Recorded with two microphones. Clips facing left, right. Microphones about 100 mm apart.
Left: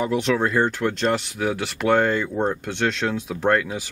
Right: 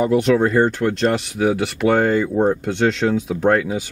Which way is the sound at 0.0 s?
5° right (ahead or behind).